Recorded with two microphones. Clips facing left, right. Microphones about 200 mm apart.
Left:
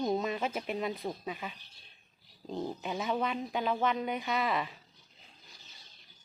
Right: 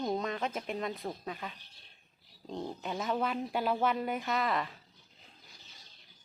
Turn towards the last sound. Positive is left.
turn(degrees=0)  # may be behind; listen again after turning